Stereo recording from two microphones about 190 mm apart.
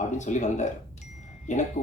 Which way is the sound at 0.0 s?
40° left (ahead or behind).